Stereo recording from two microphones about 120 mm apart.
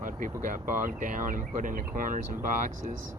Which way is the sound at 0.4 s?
90° right.